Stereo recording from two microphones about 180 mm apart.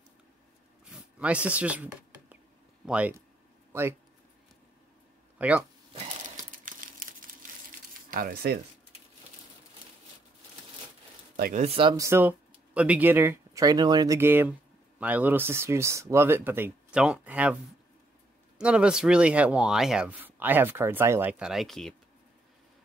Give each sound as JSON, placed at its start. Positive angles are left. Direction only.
{"t": 0.9, "sound": "a sound", "side_deg": -5}
{"t": 2.9, "sound": "speech", "side_deg": -5}
{"t": 5.4, "sound": "speech", "side_deg": -5}
{"t": 6.2, "sound": "crumpling", "side_deg": -45}
{"t": 8.1, "sound": "speech", "side_deg": -50}
{"t": 11.3, "sound": "speech", "side_deg": -55}
{"t": 11.6, "sound": "speech", "side_deg": -30}
{"t": 12.0, "sound": "speech", "side_deg": -10}
{"t": 18.6, "sound": "speech", "side_deg": -5}